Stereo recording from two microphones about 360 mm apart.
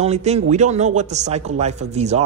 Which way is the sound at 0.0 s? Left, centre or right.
Centre.